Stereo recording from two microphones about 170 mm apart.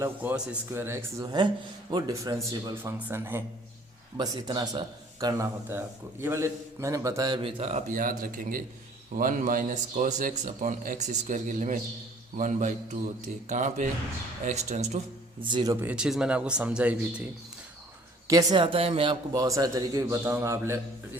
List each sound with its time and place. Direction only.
0.0 s speech: 10° right (ahead or behind)
4.2 s speech: 25° right (ahead or behind); by 15.4 s 40° right (ahead or behind)
15.4 s speech: 25° right (ahead or behind)
15.9 s speech: 5° right (ahead or behind)
18.3 s speech: 20° right (ahead or behind)